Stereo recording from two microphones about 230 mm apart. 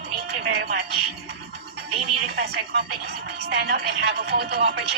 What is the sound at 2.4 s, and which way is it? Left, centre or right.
Speech, right.